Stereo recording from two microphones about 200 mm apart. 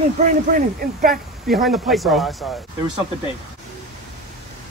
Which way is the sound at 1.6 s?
Centre (ahead or behind).